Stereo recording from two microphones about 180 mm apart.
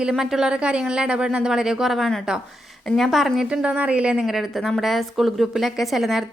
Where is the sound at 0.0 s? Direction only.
Centre (ahead or behind).